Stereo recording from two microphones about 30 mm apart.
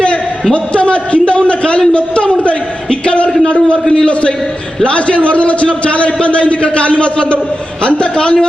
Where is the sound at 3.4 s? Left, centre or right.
Left.